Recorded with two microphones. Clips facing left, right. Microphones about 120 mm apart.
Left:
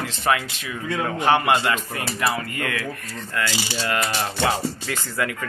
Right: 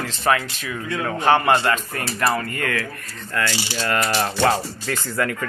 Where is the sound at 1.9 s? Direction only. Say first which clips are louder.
Right 2 dB; 45° right (ahead or behind).